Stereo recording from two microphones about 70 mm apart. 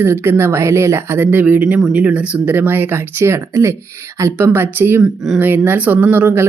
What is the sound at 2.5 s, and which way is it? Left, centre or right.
A woman's voice, right.